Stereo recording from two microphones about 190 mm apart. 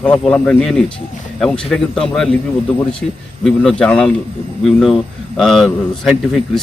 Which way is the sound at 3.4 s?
Centre (ahead or behind).